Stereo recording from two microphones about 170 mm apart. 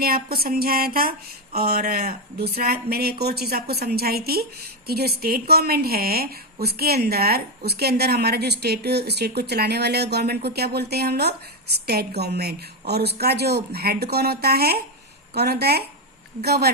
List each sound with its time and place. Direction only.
0.0 s a woman's voice: 65° right (ahead or behind)